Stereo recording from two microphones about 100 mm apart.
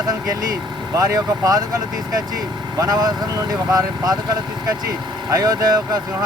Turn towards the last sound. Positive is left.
turn(degrees=-40)  # may be behind; listen again after turning